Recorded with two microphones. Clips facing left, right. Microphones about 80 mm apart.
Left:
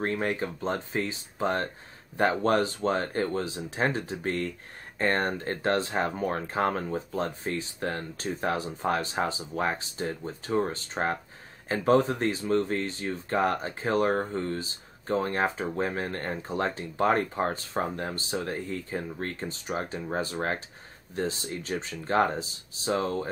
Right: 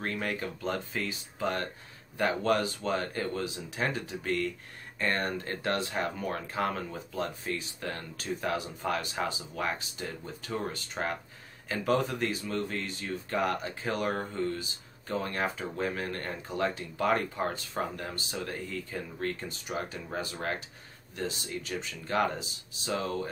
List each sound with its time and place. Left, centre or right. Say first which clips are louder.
0.0 s speech: left 5 dB; left